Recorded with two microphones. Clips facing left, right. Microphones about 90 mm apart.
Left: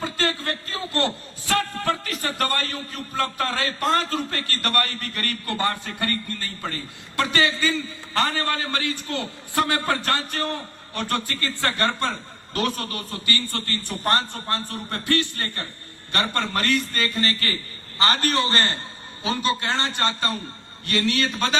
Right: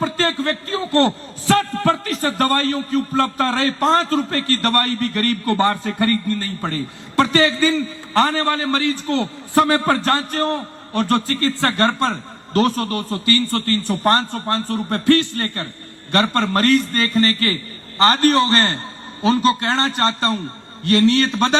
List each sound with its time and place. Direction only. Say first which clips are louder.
0.0 s a man's voice: right 6 dB; 40° right (ahead or behind)